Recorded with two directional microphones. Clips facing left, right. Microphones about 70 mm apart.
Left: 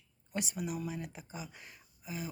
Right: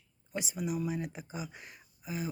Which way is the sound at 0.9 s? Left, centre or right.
Centre.